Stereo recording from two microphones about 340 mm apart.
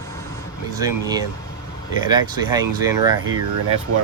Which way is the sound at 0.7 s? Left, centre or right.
Centre.